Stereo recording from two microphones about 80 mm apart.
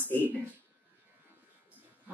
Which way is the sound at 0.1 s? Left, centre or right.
Left.